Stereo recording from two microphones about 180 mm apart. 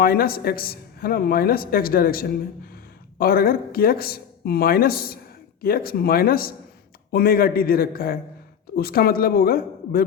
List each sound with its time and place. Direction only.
0.0 s speech: 55° left (ahead or behind)